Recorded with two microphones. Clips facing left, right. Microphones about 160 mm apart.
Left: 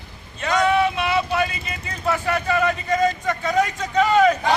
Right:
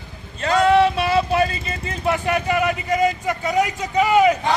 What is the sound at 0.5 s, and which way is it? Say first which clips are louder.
Vehicle: right 4 dB; 35° right (ahead or behind).